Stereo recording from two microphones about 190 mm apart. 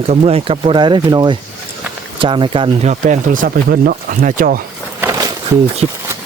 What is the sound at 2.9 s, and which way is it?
Speech, 40° right (ahead or behind).